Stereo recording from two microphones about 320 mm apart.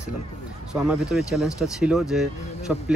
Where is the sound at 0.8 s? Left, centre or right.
Centre.